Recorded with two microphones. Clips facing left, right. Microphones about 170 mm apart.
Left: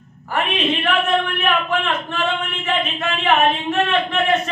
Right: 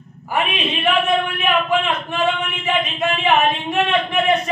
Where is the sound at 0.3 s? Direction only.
10° right (ahead or behind).